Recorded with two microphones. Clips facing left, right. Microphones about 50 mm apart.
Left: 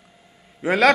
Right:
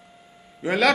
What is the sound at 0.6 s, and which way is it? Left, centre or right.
Speech, left.